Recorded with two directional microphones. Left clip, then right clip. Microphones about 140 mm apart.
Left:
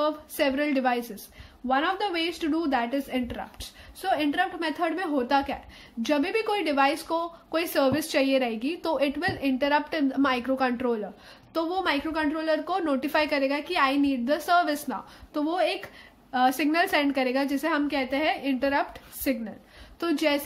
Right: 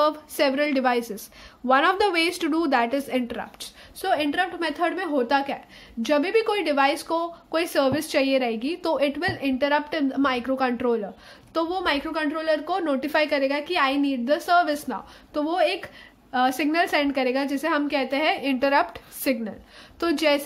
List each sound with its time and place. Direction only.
0.0 s a woman's voice: 25° right (ahead or behind)
1.7 s a woman's voice: 45° right (ahead or behind); by 20.4 s 25° right (ahead or behind)